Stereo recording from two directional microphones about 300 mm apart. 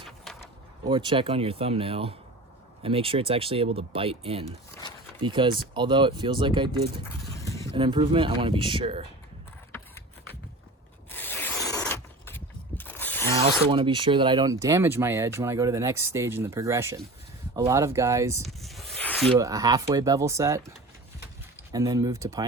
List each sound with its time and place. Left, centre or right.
0.9 s speech: centre
7.0 s vehicle: centre
7.8 s speech: centre
11.1 s mechanisms: centre
13.3 s speech: centre
18.4 s snake: centre
19.3 s speech: centre